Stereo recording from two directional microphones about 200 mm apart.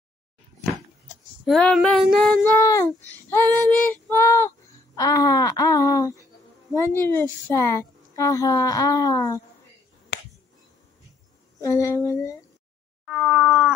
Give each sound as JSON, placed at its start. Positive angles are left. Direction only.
{"t": 1.4, "sound": "female singing", "side_deg": 0}
{"t": 2.6, "sound": "a woman's voice", "side_deg": 15}
{"t": 11.6, "sound": "a woman's voice", "side_deg": 15}
{"t": 13.0, "sound": "cat", "side_deg": 0}